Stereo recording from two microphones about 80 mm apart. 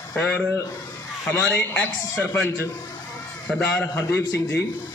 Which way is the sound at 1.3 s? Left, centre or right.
Left.